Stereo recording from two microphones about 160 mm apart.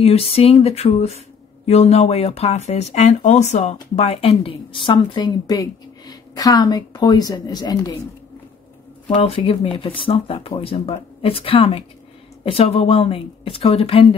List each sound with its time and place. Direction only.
0.0 s a woman's voice: 40° left (ahead or behind)
9.1 s speech: 35° left (ahead or behind)